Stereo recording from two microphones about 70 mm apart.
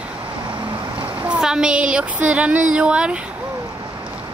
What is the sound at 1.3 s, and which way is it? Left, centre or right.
Speech, centre.